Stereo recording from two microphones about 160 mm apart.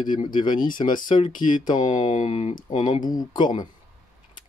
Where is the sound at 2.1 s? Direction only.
40° left (ahead or behind).